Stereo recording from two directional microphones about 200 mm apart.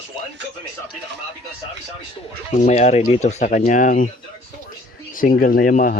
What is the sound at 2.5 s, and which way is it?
Speech, 35° left (ahead or behind).